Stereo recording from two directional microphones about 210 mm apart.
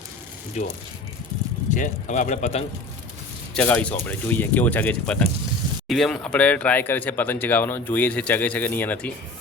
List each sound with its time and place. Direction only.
0.6 s speech: 35° left (ahead or behind)
1.7 s speech: 35° left (ahead or behind)
3.5 s speech: 5° left (ahead or behind)